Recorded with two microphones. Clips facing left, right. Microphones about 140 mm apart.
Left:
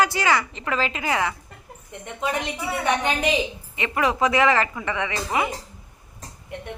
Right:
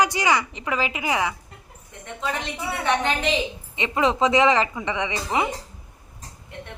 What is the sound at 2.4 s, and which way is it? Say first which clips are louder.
Speech: left 2 dB; 15° left (ahead or behind).